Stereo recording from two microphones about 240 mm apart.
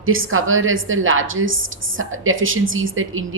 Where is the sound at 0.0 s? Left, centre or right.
Right.